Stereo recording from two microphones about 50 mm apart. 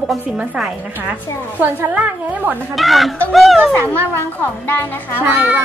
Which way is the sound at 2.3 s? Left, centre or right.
Right.